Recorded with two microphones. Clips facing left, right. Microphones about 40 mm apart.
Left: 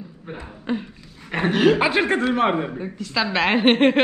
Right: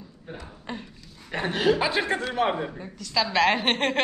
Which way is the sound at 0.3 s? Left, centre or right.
Left.